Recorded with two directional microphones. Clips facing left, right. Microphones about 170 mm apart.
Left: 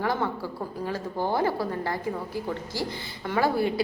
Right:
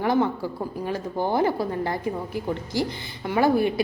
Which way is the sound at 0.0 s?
20° right (ahead or behind).